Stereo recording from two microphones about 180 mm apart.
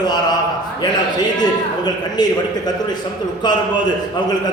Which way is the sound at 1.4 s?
20° left (ahead or behind).